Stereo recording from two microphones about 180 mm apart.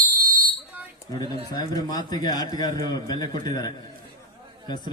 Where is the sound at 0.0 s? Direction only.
50° right (ahead or behind).